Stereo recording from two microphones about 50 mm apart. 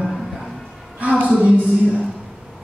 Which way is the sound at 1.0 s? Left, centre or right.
Right.